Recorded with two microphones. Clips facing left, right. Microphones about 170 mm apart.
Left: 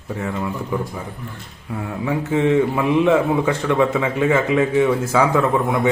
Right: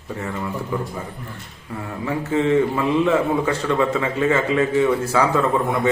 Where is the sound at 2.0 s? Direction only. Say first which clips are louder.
Left 2 dB; 15° left (ahead or behind).